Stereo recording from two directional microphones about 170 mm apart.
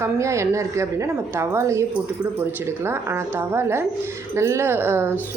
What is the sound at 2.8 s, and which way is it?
A woman's voice, 15° right (ahead or behind).